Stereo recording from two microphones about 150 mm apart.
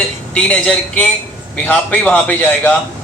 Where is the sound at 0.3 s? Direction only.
10° left (ahead or behind).